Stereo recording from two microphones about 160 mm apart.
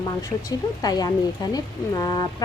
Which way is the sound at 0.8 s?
25° left (ahead or behind).